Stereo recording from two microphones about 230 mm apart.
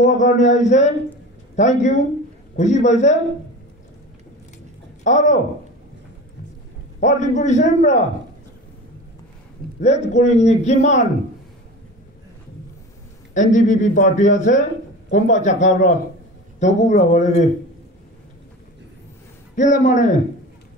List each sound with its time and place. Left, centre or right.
0.0 s a man's voice: left
5.0 s a man's voice: left
7.0 s a man's voice: left
9.8 s a man's voice: left
13.3 s a man's voice: left
19.5 s a man's voice: left